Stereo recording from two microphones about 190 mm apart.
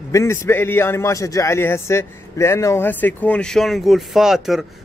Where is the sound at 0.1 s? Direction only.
15° left (ahead or behind).